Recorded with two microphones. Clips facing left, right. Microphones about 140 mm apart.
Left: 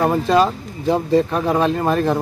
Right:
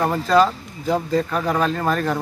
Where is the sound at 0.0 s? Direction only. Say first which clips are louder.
Left 1 dB; 20° left (ahead or behind).